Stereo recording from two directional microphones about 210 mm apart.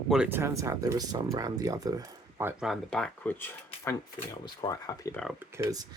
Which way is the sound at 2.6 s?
Centre (ahead or behind).